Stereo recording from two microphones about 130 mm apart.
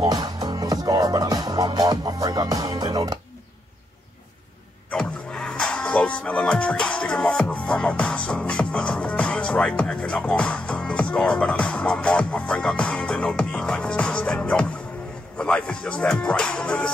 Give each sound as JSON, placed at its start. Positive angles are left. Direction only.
{"t": 0.0, "sound": "music", "side_deg": -30}
{"t": 4.9, "sound": "music", "side_deg": 5}
{"t": 15.3, "sound": "speech", "side_deg": 10}